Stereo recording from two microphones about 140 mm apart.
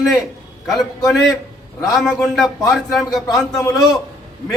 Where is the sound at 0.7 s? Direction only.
Centre (ahead or behind).